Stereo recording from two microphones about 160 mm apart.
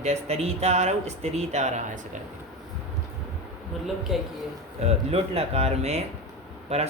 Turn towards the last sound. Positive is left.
turn(degrees=-40)  # may be behind; listen again after turning